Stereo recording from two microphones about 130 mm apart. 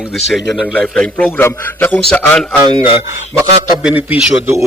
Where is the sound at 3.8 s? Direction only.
10° right (ahead or behind).